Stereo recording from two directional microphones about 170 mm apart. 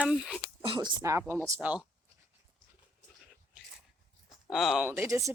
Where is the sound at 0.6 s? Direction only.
30° right (ahead or behind); by 1.8 s 10° right (ahead or behind).